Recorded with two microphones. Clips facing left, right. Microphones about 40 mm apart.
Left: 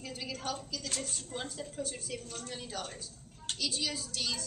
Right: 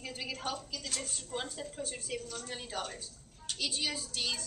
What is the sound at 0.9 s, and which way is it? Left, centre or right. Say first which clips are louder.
A woman's voice: right 2 dB; centre.